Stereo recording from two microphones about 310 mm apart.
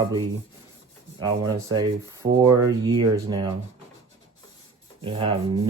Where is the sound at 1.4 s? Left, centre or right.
Centre.